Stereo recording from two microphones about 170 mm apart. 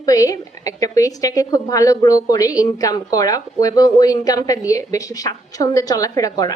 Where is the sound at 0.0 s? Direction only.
20° left (ahead or behind).